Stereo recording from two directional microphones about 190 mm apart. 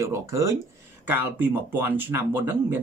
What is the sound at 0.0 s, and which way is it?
Speech, 15° right (ahead or behind).